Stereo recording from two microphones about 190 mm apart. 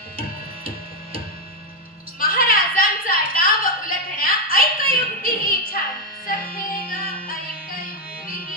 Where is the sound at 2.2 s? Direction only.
50° left (ahead or behind).